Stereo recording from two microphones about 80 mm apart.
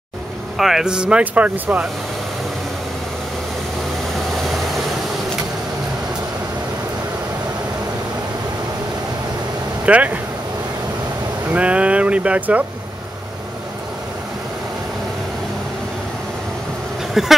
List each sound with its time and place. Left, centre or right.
0.6 s speech: centre
4.5 s vehicle: centre
9.8 s speech: centre
11.5 s speech: centre
17.1 s speech: centre